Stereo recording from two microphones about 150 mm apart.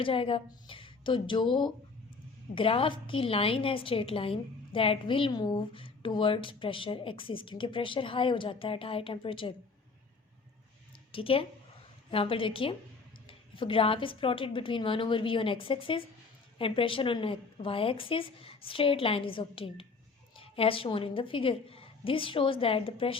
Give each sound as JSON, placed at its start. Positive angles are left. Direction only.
{"t": 0.0, "sound": "a woman's voice", "side_deg": 35}
{"t": 11.1, "sound": "a woman's voice", "side_deg": 40}